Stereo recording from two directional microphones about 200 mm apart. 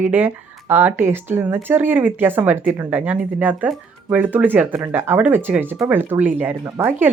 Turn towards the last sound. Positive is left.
turn(degrees=-10)  # may be behind; listen again after turning